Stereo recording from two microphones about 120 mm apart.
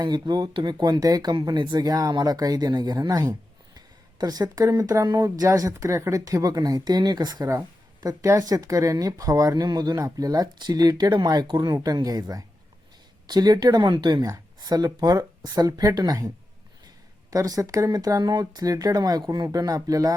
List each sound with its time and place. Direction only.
0.0 s speech: 35° right (ahead or behind)
17.3 s speech: 30° right (ahead or behind)